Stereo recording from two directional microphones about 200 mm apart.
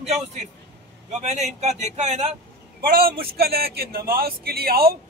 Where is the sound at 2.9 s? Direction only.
45° right (ahead or behind).